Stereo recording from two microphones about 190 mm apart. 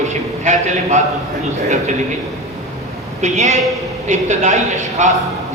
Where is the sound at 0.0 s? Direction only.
40° right (ahead or behind).